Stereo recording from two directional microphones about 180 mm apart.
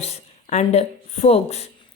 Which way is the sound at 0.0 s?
35° left (ahead or behind).